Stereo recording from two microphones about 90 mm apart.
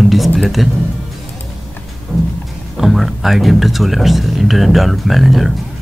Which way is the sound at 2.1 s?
15° left (ahead or behind).